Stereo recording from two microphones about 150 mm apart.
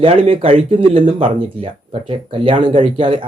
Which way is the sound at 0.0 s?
35° right (ahead or behind).